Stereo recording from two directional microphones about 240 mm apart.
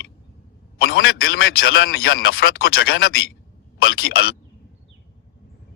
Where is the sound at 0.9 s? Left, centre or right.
Left.